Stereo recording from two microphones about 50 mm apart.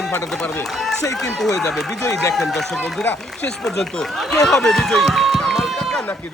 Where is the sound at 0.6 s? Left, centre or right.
Centre.